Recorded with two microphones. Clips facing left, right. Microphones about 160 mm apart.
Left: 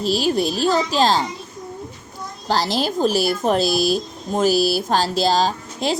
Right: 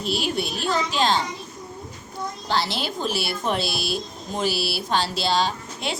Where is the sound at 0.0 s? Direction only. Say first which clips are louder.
Left 7 dB; 35° left (ahead or behind).